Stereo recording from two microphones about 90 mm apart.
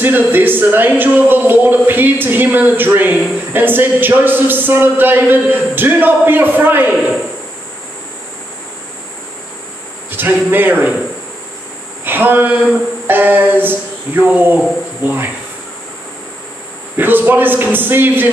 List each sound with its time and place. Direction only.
0.0 s speech: 20° right (ahead or behind)
10.1 s speech: 20° right (ahead or behind)
12.0 s speech: 20° right (ahead or behind)
16.9 s speech: 20° right (ahead or behind)